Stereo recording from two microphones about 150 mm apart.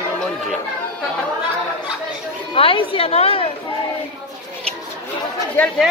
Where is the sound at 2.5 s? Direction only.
35° left (ahead or behind).